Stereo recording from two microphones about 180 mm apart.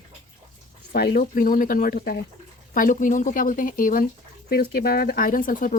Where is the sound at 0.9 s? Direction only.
60° left (ahead or behind).